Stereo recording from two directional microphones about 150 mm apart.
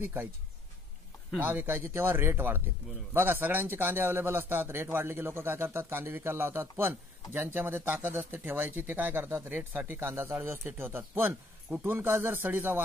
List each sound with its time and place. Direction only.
0.0 s speech: 15° right (ahead or behind)
1.4 s speech: 15° right (ahead or behind)